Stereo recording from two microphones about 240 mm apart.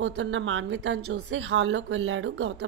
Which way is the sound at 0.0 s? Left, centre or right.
Right.